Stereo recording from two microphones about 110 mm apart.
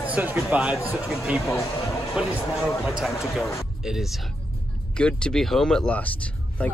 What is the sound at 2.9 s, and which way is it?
Speech, 5° right (ahead or behind).